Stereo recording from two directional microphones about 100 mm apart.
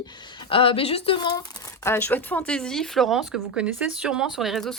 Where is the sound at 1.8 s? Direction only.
20° left (ahead or behind).